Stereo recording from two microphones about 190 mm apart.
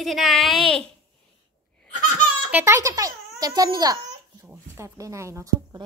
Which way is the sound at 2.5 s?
15° right (ahead or behind).